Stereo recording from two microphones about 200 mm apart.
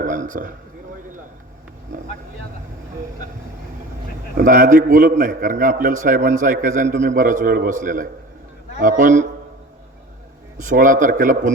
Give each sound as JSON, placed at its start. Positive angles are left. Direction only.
{"t": 0.0, "sound": "a sound", "side_deg": -40}
{"t": 4.4, "sound": "a man's voice", "side_deg": -40}
{"t": 10.6, "sound": "a man's voice", "side_deg": -40}